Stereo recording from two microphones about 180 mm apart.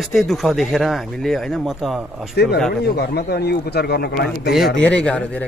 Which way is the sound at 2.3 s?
65° left (ahead or behind).